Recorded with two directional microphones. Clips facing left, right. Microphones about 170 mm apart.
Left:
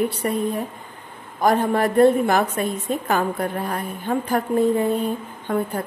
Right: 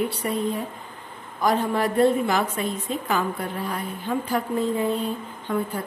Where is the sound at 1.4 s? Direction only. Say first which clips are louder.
Left 4 dB; 50° left (ahead or behind).